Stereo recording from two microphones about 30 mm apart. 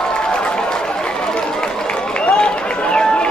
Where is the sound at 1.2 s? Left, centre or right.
Left.